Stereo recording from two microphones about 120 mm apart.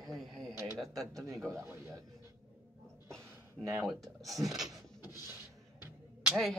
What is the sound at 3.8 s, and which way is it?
Speech, centre (ahead or behind).